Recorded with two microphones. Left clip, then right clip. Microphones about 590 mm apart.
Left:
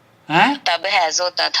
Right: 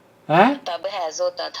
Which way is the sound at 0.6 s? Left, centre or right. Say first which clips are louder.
Left 9 dB; left.